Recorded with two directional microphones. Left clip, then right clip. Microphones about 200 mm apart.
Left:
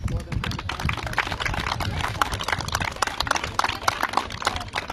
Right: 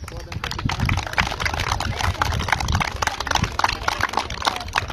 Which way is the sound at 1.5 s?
45° right (ahead or behind).